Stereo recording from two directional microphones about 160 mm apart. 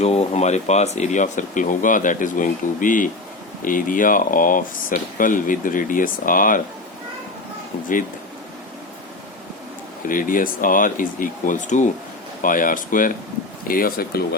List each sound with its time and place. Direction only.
0.0 s speech: 40° left (ahead or behind); by 6.6 s 60° left (ahead or behind)
10.1 s speech: 60° left (ahead or behind)